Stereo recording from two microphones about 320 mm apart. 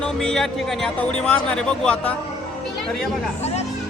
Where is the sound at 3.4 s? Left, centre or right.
Centre.